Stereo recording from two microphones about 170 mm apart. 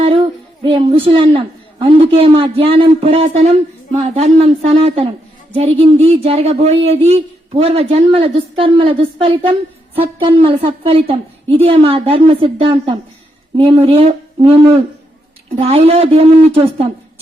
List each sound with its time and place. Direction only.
0.6 s speech: 30° right (ahead or behind)